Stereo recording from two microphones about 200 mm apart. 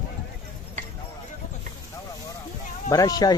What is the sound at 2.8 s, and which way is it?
Speech, 20° left (ahead or behind).